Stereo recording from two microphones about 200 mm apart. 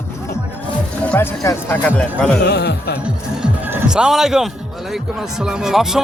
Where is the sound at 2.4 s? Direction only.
55° left (ahead or behind).